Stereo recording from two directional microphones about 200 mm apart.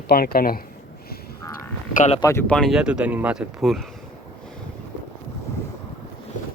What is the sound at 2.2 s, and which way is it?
Speech, 10° left (ahead or behind).